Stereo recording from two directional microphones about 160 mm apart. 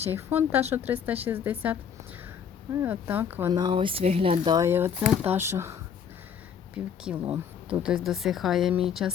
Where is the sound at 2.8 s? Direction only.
10° right (ahead or behind).